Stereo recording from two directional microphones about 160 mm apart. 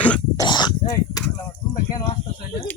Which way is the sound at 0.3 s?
25° left (ahead or behind).